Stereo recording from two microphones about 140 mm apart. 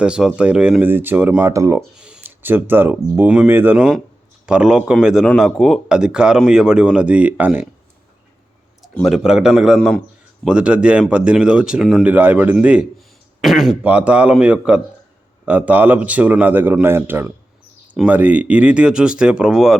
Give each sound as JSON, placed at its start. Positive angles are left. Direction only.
{"t": 0.0, "sound": "a man's voice", "side_deg": -5}
{"t": 2.0, "sound": "speech", "side_deg": -5}
{"t": 8.8, "sound": "a man's voice", "side_deg": 0}
{"t": 12.0, "sound": "a man's voice", "side_deg": -10}